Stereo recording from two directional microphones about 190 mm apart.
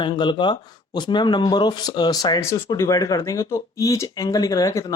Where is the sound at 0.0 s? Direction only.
25° left (ahead or behind).